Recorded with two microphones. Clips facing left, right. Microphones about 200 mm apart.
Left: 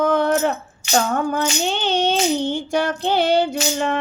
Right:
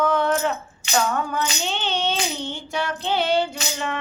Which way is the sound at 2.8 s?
50° left (ahead or behind).